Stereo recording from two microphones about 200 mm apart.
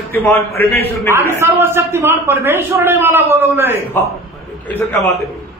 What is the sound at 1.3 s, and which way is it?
A man's voice, 15° right (ahead or behind).